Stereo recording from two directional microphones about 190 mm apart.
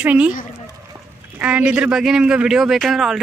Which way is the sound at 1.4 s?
5° right (ahead or behind).